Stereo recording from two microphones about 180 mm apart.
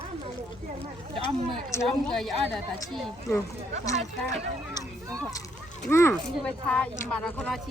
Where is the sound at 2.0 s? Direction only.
5° left (ahead or behind).